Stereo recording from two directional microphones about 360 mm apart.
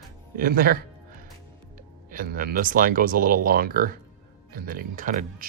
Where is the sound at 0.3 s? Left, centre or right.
Right.